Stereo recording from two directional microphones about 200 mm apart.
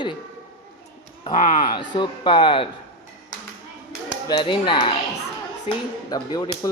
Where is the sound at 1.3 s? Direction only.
40° left (ahead or behind).